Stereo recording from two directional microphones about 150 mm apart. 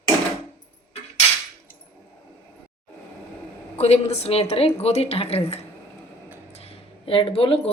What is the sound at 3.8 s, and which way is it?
A woman's voice, 45° left (ahead or behind).